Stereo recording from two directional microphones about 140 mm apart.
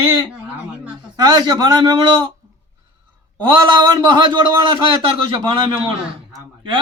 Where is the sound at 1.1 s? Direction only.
30° right (ahead or behind).